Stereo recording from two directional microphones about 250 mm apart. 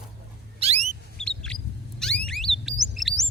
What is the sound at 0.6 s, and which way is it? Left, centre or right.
Car, right.